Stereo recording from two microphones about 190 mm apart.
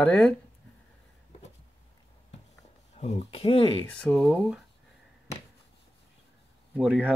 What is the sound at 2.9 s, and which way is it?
Speech, 35° left (ahead or behind).